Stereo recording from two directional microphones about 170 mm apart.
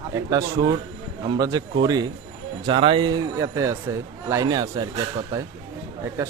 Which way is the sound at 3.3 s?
20° right (ahead or behind).